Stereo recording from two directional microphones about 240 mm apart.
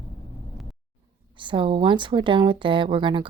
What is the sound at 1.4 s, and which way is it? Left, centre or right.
A woman's voice, right.